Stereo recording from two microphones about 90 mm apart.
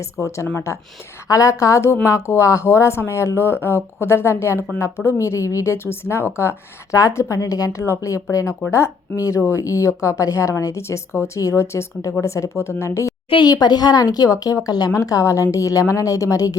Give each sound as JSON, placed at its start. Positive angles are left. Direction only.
{"t": 0.0, "sound": "a woman's voice", "side_deg": 30}
{"t": 13.3, "sound": "speech", "side_deg": 50}